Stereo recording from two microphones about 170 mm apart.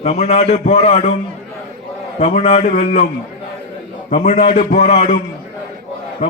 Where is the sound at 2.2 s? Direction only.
45° left (ahead or behind).